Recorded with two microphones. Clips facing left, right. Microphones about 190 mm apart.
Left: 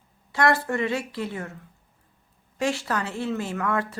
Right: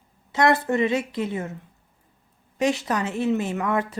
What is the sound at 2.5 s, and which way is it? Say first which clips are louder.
Speech: right 3 dB; 20° right (ahead or behind).